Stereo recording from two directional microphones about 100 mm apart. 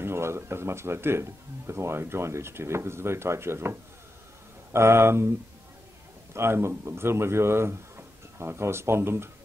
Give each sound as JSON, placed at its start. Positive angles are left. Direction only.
{"t": 0.0, "sound": "speech", "side_deg": -25}
{"t": 4.7, "sound": "speech", "side_deg": -25}
{"t": 6.3, "sound": "speech", "side_deg": -25}